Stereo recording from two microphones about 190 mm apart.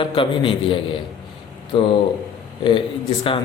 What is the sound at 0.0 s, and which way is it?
A man's voice, 25° left (ahead or behind).